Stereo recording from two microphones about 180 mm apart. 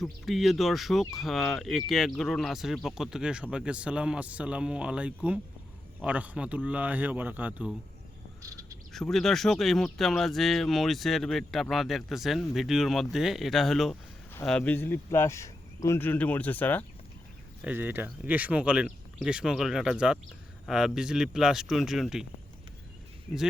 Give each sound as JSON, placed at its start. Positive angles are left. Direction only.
{"t": 0.0, "sound": "speech", "side_deg": 0}
{"t": 8.4, "sound": "frog", "side_deg": -20}
{"t": 8.9, "sound": "speech", "side_deg": 0}
{"t": 17.6, "sound": "speech", "side_deg": -10}